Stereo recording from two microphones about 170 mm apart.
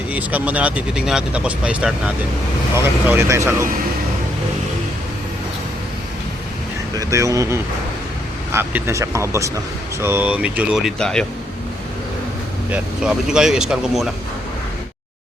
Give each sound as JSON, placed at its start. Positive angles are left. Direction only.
{"t": 0.1, "sound": "speech", "side_deg": -10}
{"t": 7.0, "sound": "speech", "side_deg": -20}
{"t": 12.7, "sound": "speech", "side_deg": -5}